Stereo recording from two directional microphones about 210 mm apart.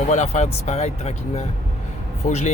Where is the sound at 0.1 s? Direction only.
35° left (ahead or behind).